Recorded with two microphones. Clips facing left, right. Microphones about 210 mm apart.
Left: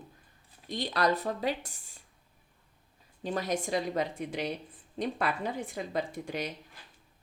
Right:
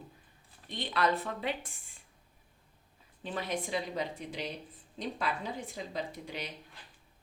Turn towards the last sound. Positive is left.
turn(degrees=45)  # may be behind; listen again after turning